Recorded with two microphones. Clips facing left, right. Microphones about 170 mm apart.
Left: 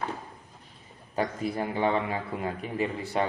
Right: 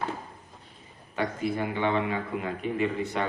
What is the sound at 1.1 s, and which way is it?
A man's voice, 35° left (ahead or behind).